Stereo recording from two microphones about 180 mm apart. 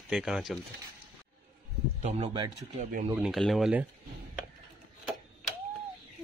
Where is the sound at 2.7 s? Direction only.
40° right (ahead or behind).